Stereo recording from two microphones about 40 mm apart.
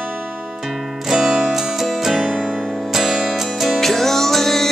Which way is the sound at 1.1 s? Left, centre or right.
Centre.